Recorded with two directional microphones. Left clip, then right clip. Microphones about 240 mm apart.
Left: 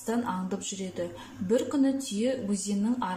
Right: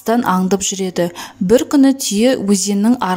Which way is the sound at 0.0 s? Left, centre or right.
Right.